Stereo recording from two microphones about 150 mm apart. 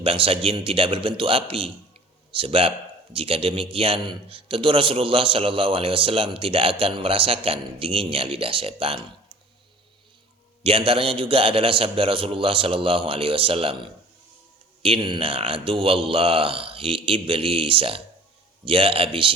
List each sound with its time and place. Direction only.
0.0 s a man's voice: 40° right (ahead or behind)
10.6 s a man's voice: 35° right (ahead or behind)